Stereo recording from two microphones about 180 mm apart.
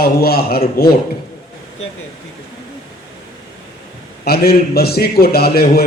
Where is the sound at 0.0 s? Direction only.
60° left (ahead or behind).